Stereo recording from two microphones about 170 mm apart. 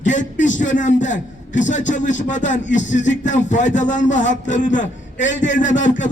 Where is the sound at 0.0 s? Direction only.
45° left (ahead or behind).